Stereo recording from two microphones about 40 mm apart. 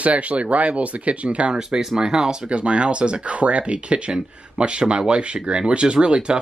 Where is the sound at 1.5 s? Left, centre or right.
Centre.